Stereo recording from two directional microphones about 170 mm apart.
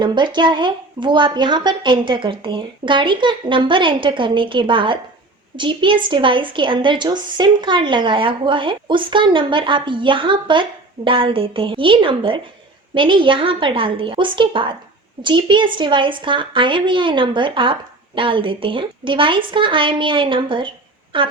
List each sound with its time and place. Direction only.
0.0 s speech: 25° right (ahead or behind)